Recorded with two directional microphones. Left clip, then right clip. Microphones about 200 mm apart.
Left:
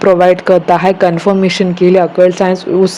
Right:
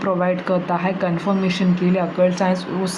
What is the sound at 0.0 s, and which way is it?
Speech, 45° left (ahead or behind).